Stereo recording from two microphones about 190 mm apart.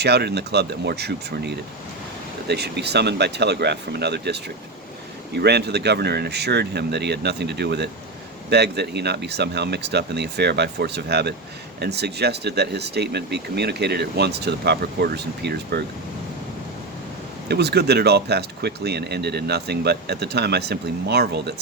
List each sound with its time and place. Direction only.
0.0 s speech: 60° right (ahead or behind)
17.5 s speech: 60° right (ahead or behind)